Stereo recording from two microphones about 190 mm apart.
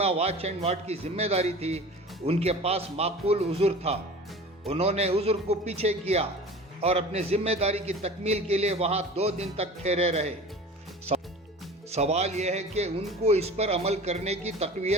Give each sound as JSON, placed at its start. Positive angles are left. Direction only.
{"t": 0.0, "sound": "a man's voice", "side_deg": -35}
{"t": 11.9, "sound": "a man's voice", "side_deg": -35}